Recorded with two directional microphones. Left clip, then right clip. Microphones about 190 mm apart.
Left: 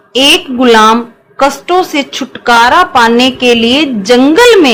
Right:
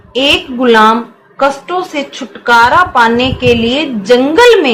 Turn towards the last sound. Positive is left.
turn(degrees=50)  # may be behind; listen again after turning